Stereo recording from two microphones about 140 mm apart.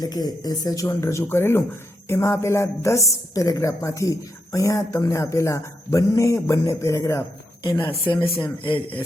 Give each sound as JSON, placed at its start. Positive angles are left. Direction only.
{"t": 0.0, "sound": "a woman's voice", "side_deg": 30}
{"t": 8.6, "sound": "speech", "side_deg": 40}